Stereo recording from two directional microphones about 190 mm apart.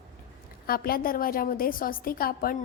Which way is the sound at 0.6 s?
50° left (ahead or behind).